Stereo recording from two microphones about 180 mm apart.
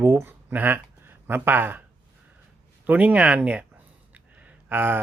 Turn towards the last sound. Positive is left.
turn(degrees=-10)  # may be behind; listen again after turning